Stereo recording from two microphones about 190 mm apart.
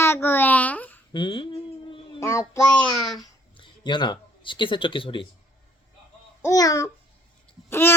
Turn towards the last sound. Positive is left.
turn(degrees=10)  # may be behind; listen again after turning